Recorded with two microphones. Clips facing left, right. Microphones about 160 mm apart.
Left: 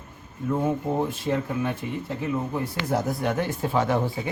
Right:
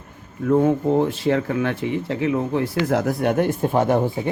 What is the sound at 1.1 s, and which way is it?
Speech, 80° right.